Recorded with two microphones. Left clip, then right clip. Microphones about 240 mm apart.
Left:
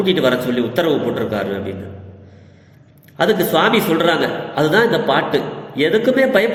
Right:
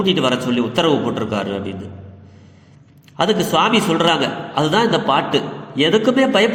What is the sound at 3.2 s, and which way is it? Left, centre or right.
A man's voice, right.